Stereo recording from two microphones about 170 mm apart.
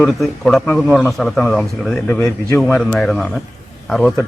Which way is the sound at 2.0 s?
15° left (ahead or behind).